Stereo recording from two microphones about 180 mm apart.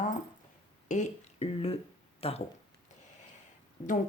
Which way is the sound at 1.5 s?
30° left (ahead or behind).